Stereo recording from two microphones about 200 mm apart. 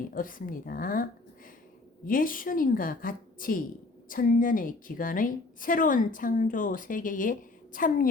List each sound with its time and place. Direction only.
0.1 s a woman's voice: 45° left (ahead or behind)
2.0 s a woman's voice: 45° left (ahead or behind)